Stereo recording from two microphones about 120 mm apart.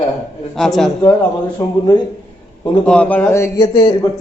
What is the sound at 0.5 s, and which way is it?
Speech, centre (ahead or behind).